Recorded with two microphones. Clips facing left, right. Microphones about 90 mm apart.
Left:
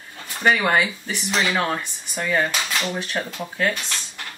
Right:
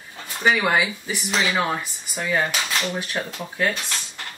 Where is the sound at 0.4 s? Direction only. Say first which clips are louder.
Left 1 dB; 5° right (ahead or behind).